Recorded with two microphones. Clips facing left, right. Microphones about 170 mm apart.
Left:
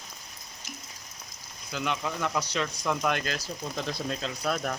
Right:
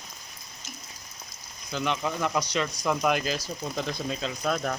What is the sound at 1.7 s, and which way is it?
Speech, centre (ahead or behind).